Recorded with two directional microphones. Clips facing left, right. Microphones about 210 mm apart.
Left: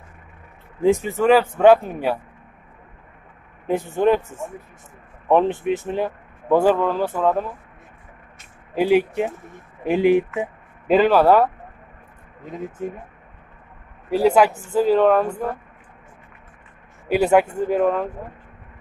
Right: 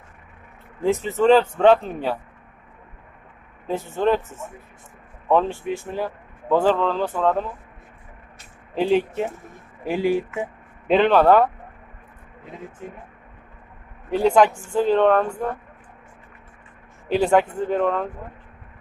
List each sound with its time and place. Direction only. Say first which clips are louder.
0.8 s speech: left 1 dB; 15° left (ahead or behind)
3.6 s speech: left 3 dB; 15° left (ahead or behind)
5.3 s speech: left 3 dB; 15° left (ahead or behind)
8.7 s speech: left 2 dB; 10° left (ahead or behind)
10.9 s speech: left 1 dB; 5° left (ahead or behind)
14.1 s speech: left 1 dB; 5° left (ahead or behind)
17.1 s speech: left 2 dB; 10° left (ahead or behind)